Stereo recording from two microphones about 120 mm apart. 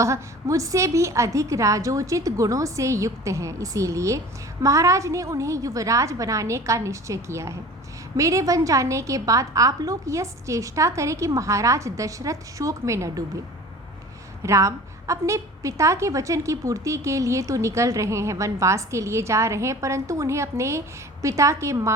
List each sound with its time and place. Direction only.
0.0 s a woman's voice: 25° right (ahead or behind)
14.4 s a woman's voice: 25° right (ahead or behind)